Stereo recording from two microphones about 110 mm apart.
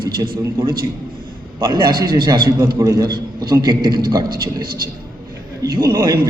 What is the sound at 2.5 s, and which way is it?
A man's voice, 30° right (ahead or behind).